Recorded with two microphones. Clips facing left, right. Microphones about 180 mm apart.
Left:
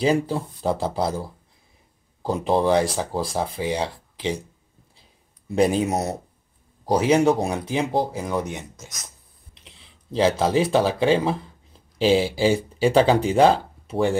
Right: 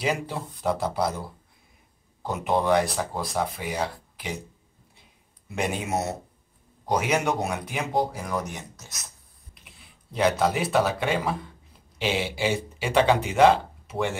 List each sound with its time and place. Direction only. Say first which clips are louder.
0.0 s speech: left 7 dB; 30° left (ahead or behind)
2.2 s speech: left 4 dB; 30° left (ahead or behind)
5.5 s speech: left 8 dB; 35° left (ahead or behind)